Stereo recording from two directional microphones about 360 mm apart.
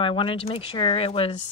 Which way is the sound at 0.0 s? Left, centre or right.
Centre.